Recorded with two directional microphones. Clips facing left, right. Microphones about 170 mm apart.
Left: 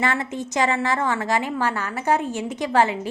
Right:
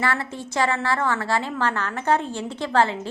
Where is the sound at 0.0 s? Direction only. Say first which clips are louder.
Left 2 dB; 20° left (ahead or behind).